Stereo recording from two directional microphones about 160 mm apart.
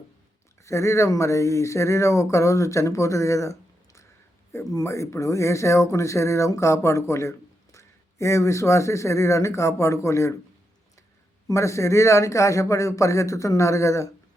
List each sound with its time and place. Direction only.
0.6 s speech: 20° left (ahead or behind)
11.4 s speech: 20° left (ahead or behind)